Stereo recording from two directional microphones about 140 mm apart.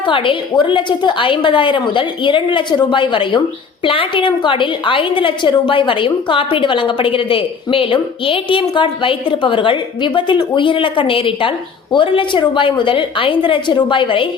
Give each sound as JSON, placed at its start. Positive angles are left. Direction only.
{"t": 0.0, "sound": "a woman's voice", "side_deg": 35}